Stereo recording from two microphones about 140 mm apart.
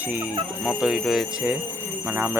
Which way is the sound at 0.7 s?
Centre (ahead or behind).